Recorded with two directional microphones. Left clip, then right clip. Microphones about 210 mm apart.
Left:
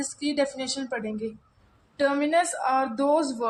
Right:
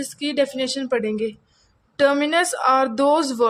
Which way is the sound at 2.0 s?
55° right (ahead or behind).